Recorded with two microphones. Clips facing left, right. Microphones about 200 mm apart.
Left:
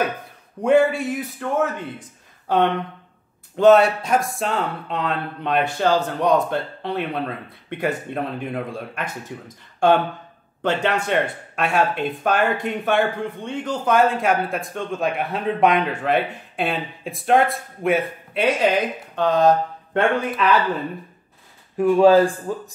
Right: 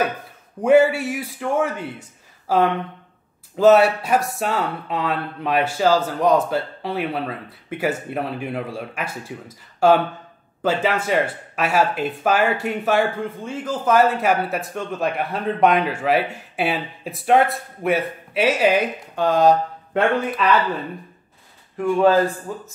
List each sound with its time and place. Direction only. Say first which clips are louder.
0.6 s speech: right 2 dB; 5° right (ahead or behind)
10.6 s speech: right 1 dB; 5° right (ahead or behind)
21.7 s speech: left 3 dB; 15° left (ahead or behind)